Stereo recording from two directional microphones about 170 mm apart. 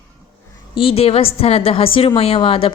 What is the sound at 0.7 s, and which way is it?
A woman's voice, 35° left (ahead or behind).